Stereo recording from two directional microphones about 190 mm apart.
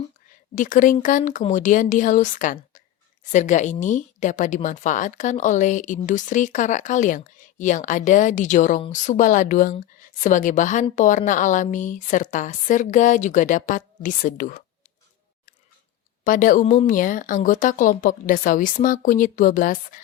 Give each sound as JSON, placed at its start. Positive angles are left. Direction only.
{"t": 0.5, "sound": "speech", "side_deg": 45}
{"t": 16.2, "sound": "speech", "side_deg": 45}